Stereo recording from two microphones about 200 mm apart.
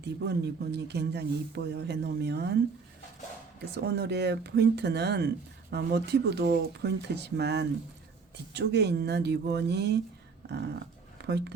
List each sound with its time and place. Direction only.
0.0 s speech: 55° right (ahead or behind)
3.8 s speech: 55° right (ahead or behind)
10.4 s dog: 55° right (ahead or behind)
11.2 s speech: 55° right (ahead or behind)